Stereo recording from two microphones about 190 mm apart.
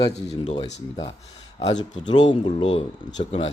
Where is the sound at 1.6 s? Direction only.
25° left (ahead or behind).